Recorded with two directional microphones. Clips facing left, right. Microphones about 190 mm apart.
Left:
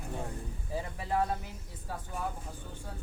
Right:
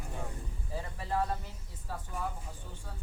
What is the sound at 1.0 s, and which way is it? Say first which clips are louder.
Speech: left 2 dB; 15° left (ahead or behind).